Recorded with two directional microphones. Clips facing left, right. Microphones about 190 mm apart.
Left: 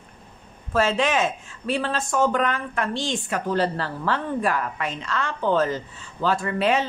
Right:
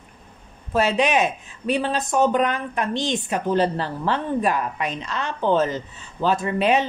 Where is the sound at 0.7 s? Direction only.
15° right (ahead or behind).